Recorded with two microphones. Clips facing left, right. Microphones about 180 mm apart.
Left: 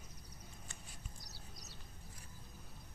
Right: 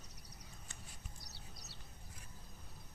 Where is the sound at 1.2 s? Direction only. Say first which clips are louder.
Left 1 dB; 65° right (ahead or behind).